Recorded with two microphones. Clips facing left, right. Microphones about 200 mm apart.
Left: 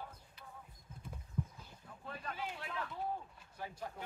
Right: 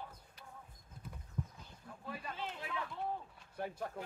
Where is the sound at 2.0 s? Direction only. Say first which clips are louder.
Right 1 dB; 10° right (ahead or behind).